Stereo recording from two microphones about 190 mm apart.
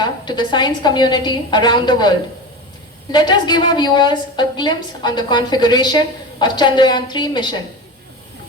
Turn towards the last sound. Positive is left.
turn(degrees=25)  # may be behind; listen again after turning